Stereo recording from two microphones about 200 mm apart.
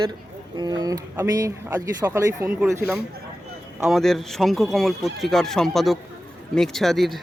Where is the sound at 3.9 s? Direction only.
Centre (ahead or behind).